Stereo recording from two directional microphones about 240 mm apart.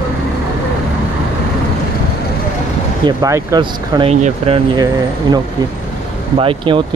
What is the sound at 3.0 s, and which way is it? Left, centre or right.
Speech, centre.